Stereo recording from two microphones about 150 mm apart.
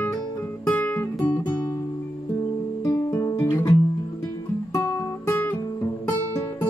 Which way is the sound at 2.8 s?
20° left (ahead or behind).